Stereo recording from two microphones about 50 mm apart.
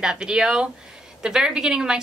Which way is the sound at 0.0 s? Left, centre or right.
Centre.